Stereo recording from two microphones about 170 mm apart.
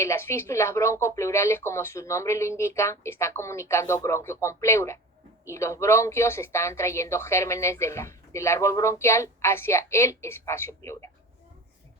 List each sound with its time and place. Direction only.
0.0 s speech: 15° left (ahead or behind)